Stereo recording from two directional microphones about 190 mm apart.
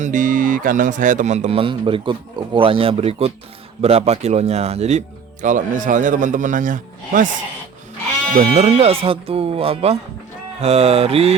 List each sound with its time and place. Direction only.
0.0 s speech: 45° right (ahead or behind)
8.4 s speech: 35° right (ahead or behind)